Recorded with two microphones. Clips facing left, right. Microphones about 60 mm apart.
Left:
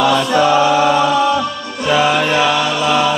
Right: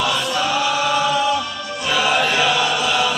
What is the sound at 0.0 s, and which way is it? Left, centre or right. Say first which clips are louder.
Mantra: left 8 dB; left.